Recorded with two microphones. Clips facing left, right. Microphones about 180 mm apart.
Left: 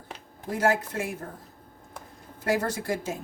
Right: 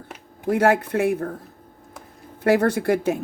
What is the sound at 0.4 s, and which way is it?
Speech, 65° right (ahead or behind).